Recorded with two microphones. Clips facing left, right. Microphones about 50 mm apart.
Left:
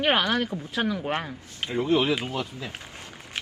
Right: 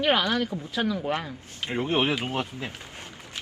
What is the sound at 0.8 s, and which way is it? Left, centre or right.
Speech, centre.